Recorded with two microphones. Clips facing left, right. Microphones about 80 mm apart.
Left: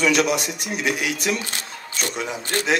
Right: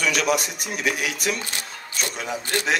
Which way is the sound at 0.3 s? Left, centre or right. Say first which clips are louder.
Right 1 dB; right.